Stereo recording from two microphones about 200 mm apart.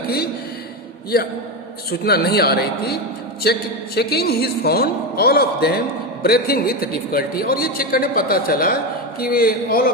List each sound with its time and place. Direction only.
1.9 s a man's voice: 50° left (ahead or behind)